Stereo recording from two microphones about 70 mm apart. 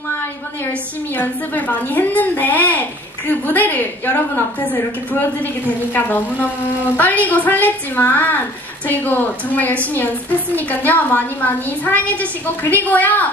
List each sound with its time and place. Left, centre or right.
1.1 s a woman's voice: left
5.9 s a woman's voice: left